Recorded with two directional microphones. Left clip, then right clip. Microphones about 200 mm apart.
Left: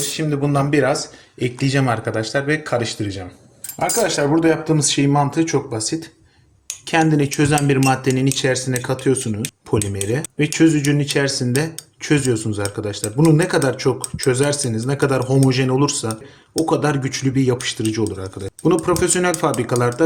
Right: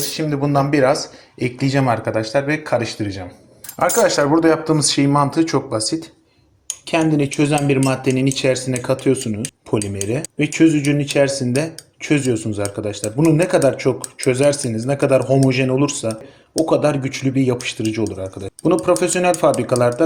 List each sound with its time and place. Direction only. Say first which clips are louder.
0.0 s speech: right 1 dB; 5° left (ahead or behind)
6.9 s speech: left 1 dB; 20° left (ahead or behind)